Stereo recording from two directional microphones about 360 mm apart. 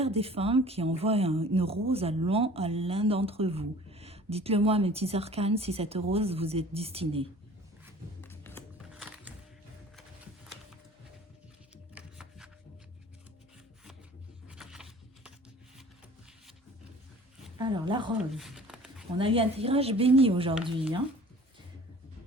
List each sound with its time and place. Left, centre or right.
0.0 s speech: centre
8.2 s music: centre
11.9 s shuffling cards: centre
14.5 s a sound: centre
17.6 s speech: centre
18.3 s a sound: centre
19.1 s speech: centre